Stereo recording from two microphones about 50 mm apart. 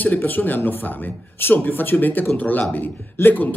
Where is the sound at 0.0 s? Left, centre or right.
Left.